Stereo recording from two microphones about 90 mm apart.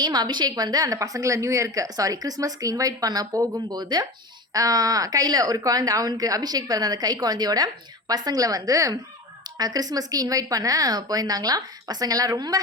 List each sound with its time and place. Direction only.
0.0 s speech: 50° right (ahead or behind)